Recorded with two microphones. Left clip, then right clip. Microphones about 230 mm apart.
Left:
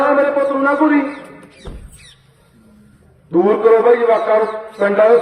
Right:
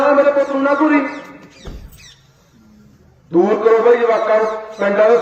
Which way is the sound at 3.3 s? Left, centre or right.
Centre.